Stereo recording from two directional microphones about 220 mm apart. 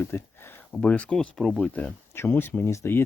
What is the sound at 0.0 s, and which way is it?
Speech, 10° left (ahead or behind).